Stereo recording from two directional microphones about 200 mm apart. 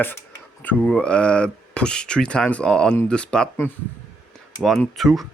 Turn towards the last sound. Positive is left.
turn(degrees=0)  # may be behind; listen again after turning